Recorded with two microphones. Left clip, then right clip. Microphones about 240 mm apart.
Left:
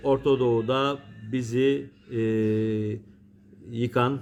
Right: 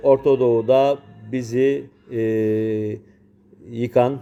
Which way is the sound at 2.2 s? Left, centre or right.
Left.